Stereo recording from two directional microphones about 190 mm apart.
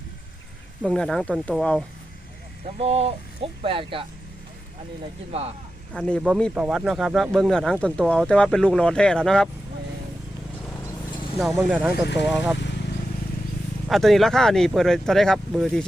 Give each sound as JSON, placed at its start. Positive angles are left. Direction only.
{"t": 0.8, "sound": "speech", "side_deg": 5}
{"t": 2.7, "sound": "speech", "side_deg": -30}
{"t": 5.3, "sound": "speech", "side_deg": -35}
{"t": 5.9, "sound": "speech", "side_deg": 5}
{"t": 11.3, "sound": "speech", "side_deg": 0}
{"t": 13.8, "sound": "speech", "side_deg": 0}